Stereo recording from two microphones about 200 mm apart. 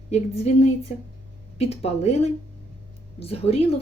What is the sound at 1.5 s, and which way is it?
A woman's voice, 30° left (ahead or behind).